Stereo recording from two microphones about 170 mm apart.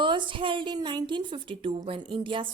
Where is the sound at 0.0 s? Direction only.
30° right (ahead or behind).